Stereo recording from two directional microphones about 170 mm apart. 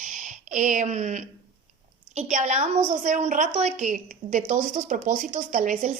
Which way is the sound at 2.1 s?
45° right (ahead or behind).